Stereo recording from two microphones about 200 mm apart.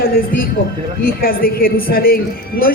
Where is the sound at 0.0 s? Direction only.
45° left (ahead or behind).